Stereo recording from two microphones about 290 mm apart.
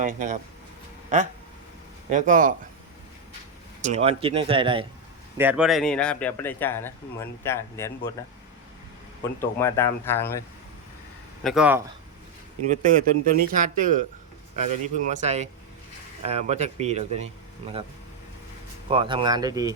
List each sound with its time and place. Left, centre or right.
0.0 s speech: right
3.8 s speech: right
5.4 s speech: centre
9.4 s speech: centre
11.4 s speech: centre
12.6 s speech: right
18.9 s speech: centre